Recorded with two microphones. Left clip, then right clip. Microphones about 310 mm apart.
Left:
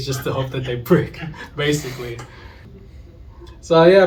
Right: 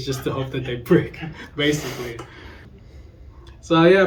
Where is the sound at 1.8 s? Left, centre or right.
Right.